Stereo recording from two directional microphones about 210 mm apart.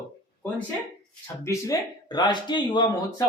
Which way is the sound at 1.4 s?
20° left (ahead or behind).